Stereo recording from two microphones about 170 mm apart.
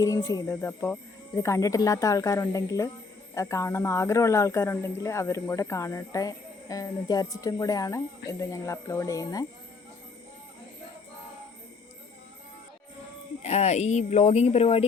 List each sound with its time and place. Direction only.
0.0 s speech: 20° left (ahead or behind)
13.4 s speech: 40° left (ahead or behind)